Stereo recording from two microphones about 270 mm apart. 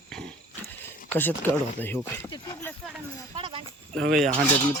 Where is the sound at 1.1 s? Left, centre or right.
Centre.